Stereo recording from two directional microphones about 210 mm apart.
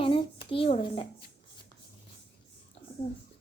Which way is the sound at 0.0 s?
25° left (ahead or behind).